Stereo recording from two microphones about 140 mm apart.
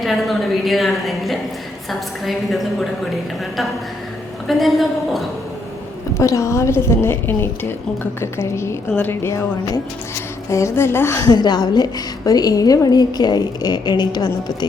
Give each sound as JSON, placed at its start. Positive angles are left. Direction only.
{"t": 0.0, "sound": "a woman's voice", "side_deg": 0}
{"t": 4.4, "sound": "a woman's voice", "side_deg": 0}
{"t": 6.1, "sound": "a woman's voice", "side_deg": 20}
{"t": 11.3, "sound": "a woman's voice", "side_deg": 30}